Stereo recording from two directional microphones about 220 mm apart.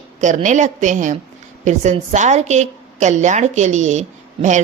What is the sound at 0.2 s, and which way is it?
A woman's voice, 35° right (ahead or behind).